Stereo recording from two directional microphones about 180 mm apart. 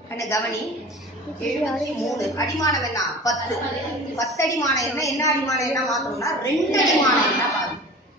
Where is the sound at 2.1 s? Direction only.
20° left (ahead or behind).